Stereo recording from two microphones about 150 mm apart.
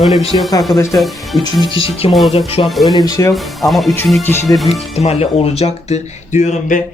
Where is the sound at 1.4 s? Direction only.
30° left (ahead or behind).